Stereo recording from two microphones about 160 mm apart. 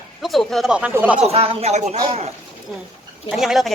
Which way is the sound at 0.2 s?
Centre (ahead or behind).